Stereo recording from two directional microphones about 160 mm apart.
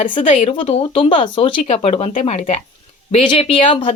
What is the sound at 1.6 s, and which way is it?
Speech, 40° left (ahead or behind).